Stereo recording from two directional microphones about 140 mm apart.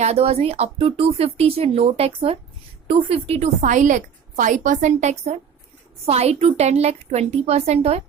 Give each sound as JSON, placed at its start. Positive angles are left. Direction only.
{"t": 0.0, "sound": "a woman's voice", "side_deg": -50}